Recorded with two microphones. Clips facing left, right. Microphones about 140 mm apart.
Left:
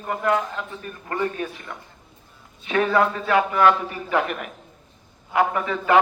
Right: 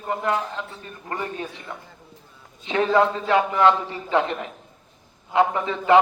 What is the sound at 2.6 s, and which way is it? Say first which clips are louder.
A man's voice: right 1 dB; 25° right (ahead or behind).